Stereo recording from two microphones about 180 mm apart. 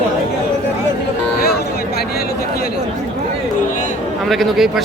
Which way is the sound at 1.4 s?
60° left (ahead or behind).